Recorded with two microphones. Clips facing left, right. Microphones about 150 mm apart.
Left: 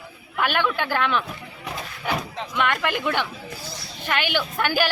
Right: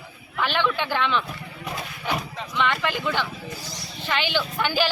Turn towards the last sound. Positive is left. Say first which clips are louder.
# left 1 dB
turn(degrees=10)  # may be behind; listen again after turning